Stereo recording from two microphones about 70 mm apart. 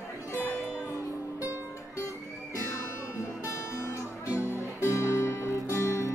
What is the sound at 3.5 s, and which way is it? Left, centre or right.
Music, left.